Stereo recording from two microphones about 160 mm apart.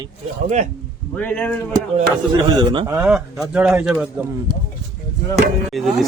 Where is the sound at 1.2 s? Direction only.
10° left (ahead or behind).